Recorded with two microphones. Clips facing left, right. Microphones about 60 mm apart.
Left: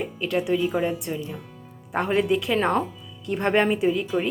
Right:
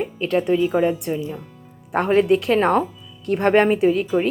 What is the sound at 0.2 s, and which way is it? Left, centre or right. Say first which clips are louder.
Speech: right 4 dB; right.